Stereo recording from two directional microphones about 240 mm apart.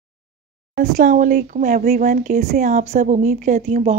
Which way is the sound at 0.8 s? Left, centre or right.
Right.